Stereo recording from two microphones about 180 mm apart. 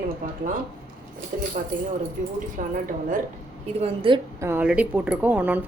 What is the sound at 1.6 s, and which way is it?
A woman's voice, 50° right (ahead or behind).